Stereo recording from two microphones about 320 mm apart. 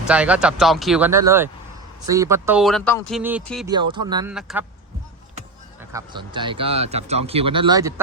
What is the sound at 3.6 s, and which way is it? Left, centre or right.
Speech, centre.